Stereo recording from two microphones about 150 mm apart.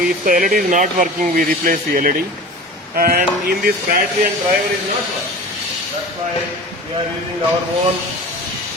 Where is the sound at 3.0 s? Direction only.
90° right.